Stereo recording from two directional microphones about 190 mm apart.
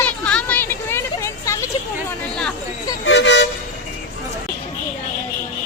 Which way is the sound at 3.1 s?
70° left (ahead or behind).